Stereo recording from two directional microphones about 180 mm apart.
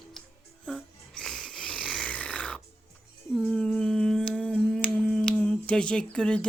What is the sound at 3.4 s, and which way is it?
Humming, 5° left (ahead or behind).